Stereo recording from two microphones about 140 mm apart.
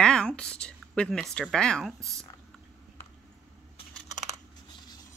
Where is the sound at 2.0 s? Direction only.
20° right (ahead or behind).